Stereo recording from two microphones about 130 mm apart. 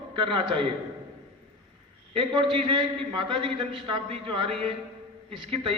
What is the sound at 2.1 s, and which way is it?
A man's voice, 40° right (ahead or behind).